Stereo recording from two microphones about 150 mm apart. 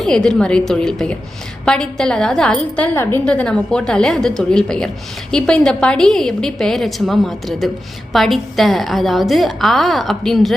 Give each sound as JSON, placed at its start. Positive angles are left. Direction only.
{"t": 0.0, "sound": "a woman's voice", "side_deg": 5}